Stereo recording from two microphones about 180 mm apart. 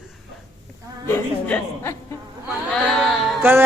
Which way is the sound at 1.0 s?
10° left (ahead or behind).